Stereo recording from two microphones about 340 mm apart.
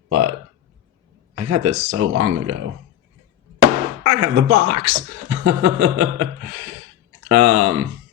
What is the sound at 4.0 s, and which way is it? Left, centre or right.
Speech, right.